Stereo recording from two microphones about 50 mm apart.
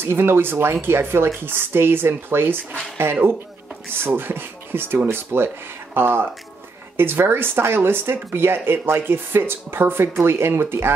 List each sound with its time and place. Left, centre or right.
0.0 s speech: right
4.1 s speech: right